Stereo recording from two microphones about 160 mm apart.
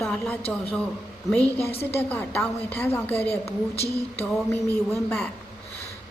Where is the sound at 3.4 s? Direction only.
40° left (ahead or behind).